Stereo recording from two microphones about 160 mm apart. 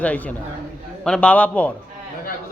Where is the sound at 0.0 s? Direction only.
10° left (ahead or behind).